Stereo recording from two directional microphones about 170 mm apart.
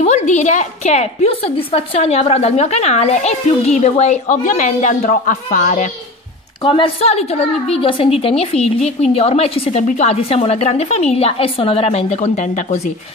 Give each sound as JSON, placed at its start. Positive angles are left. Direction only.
{"t": 0.0, "sound": "a woman's voice", "side_deg": 40}
{"t": 6.6, "sound": "a woman's voice", "side_deg": 30}